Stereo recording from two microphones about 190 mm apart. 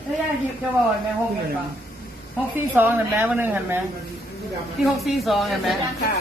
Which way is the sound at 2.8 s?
10° right (ahead or behind).